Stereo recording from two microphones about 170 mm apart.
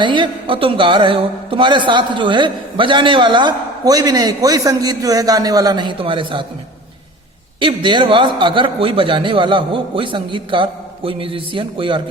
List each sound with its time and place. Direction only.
0.0 s speech: 30° right (ahead or behind)
7.6 s speech: 30° right (ahead or behind)